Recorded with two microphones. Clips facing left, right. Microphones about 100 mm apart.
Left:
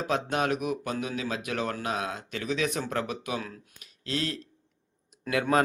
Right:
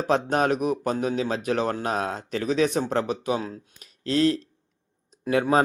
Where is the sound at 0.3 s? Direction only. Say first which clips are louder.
Right 5 dB; 40° right (ahead or behind).